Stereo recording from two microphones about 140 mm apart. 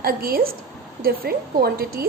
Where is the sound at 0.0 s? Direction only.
90° right.